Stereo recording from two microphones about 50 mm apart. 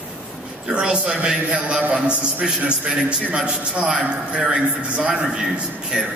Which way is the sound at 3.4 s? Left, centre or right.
Centre.